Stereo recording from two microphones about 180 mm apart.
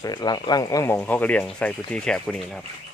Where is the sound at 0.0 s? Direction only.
25° left (ahead or behind); by 2.6 s 5° left (ahead or behind).